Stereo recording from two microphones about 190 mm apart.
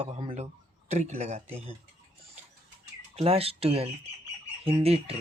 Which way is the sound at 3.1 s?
30° right (ahead or behind).